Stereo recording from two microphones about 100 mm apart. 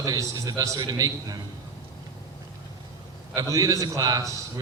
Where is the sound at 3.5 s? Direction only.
35° right (ahead or behind).